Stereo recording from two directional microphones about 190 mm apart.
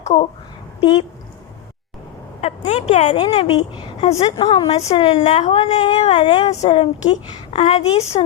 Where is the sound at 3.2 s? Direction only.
25° left (ahead or behind).